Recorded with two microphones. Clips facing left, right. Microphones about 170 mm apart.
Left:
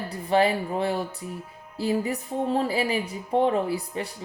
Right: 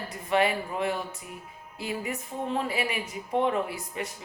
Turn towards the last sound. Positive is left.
turn(degrees=30)  # may be behind; listen again after turning